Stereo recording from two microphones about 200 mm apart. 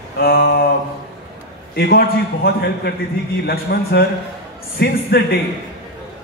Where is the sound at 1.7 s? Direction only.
50° left (ahead or behind).